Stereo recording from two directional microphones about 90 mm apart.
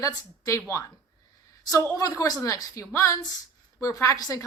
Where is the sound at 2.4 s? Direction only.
35° left (ahead or behind).